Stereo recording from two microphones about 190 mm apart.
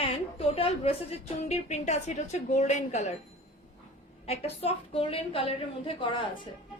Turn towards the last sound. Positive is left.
turn(degrees=25)  # may be behind; listen again after turning